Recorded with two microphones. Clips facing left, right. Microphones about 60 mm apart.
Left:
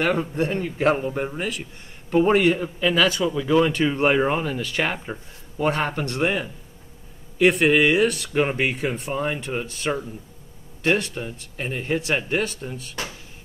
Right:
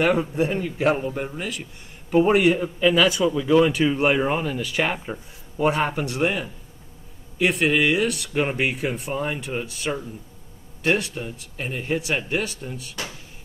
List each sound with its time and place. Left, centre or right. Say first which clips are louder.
0.0 s speech: right 2 dB; centre
0.7 s speech: left 2 dB; centre
2.0 s speech: even; centre